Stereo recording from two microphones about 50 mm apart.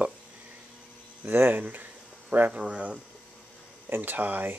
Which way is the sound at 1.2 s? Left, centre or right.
Right.